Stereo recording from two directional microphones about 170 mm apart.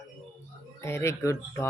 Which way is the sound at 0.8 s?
15° left (ahead or behind).